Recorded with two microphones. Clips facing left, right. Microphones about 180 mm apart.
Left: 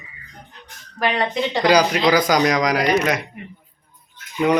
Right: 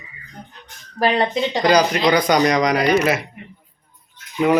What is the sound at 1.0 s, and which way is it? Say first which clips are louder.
Speech: right 3 dB; 35° right (ahead or behind).